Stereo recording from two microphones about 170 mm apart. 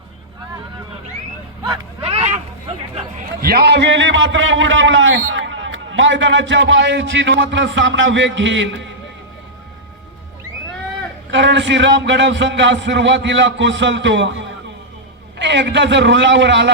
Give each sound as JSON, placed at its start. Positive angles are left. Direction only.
{"t": 1.6, "sound": "a sound", "side_deg": -30}
{"t": 3.4, "sound": "a man's voice", "side_deg": -65}
{"t": 11.3, "sound": "a man's voice", "side_deg": -90}